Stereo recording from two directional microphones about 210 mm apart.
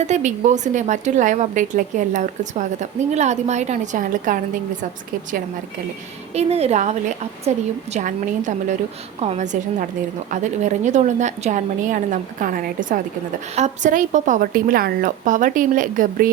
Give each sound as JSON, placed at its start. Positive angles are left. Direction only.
{"t": 0.0, "sound": "a woman's voice", "side_deg": -35}
{"t": 6.3, "sound": "a woman's voice", "side_deg": -30}